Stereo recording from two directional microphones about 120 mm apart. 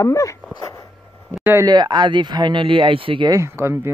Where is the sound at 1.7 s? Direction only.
35° right (ahead or behind).